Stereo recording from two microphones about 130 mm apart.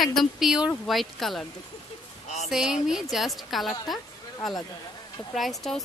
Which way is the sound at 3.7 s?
30° left (ahead or behind).